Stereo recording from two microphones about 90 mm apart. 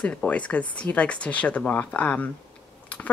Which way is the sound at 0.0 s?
15° left (ahead or behind).